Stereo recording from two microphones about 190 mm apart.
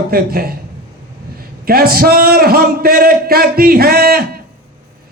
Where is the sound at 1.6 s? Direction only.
50° right (ahead or behind).